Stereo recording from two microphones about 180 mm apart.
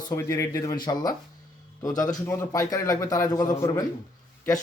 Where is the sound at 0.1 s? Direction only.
15° left (ahead or behind).